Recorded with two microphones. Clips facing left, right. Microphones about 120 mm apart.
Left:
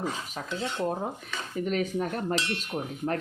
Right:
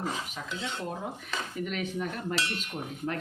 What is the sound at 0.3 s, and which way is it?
Speech, 40° left (ahead or behind).